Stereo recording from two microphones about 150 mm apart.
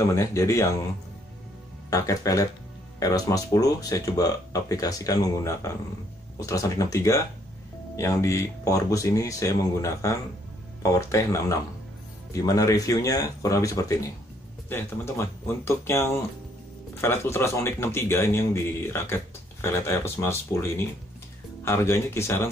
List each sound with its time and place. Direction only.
0.0 s speech: 20° left (ahead or behind)
1.9 s a man's voice: 20° left (ahead or behind)